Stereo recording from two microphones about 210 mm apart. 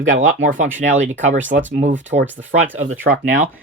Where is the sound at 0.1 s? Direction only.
65° right (ahead or behind).